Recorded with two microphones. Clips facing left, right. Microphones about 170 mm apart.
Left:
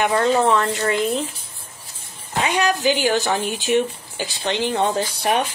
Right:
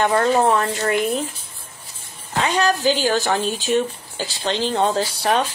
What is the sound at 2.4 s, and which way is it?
Speech, 20° left (ahead or behind).